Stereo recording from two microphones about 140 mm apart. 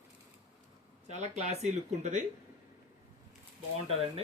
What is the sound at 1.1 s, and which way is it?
Speech, 55° right (ahead or behind).